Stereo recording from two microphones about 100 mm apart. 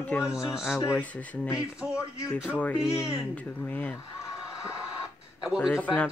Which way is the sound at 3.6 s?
15° left (ahead or behind).